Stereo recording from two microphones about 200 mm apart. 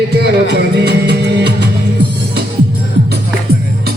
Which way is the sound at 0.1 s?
55° right (ahead or behind).